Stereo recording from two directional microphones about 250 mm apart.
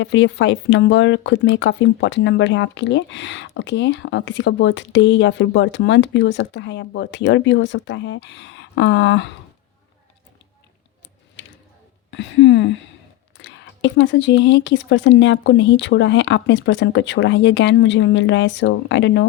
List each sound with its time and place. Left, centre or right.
0.0 s speech: left
11.4 s a sound: left
12.1 s speech: left